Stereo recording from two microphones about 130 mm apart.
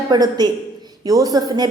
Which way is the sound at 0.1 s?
30° right (ahead or behind).